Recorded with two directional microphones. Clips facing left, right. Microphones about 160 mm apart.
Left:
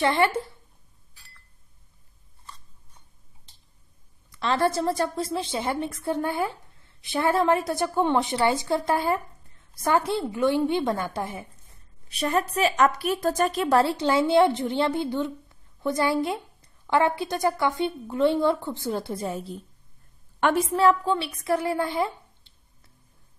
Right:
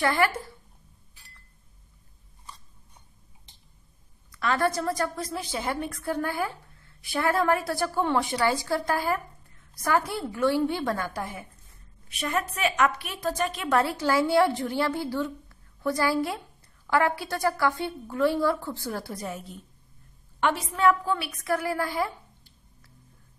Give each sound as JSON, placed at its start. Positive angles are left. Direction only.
{"t": 0.0, "sound": "a woman's voice", "side_deg": 25}
{"t": 4.3, "sound": "a woman's voice", "side_deg": 25}
{"t": 20.3, "sound": "a woman's voice", "side_deg": 50}
{"t": 20.7, "sound": "a woman's voice", "side_deg": 30}